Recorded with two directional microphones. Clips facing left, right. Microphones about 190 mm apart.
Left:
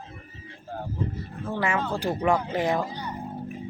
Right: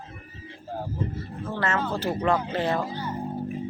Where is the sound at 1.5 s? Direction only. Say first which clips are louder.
Left 1 dB; 10° left (ahead or behind).